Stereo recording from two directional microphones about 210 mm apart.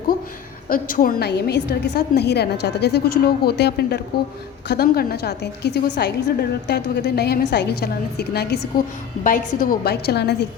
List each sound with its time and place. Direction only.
0.7 s a woman's voice: 40° left (ahead or behind)
9.2 s a woman's voice: 40° left (ahead or behind)